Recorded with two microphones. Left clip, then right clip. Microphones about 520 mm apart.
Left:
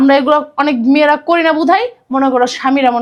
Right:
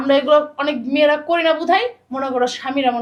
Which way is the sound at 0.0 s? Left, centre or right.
Left.